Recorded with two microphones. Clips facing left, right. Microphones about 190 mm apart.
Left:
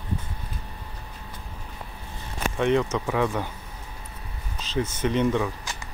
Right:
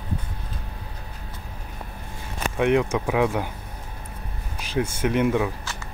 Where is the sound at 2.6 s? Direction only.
10° right (ahead or behind).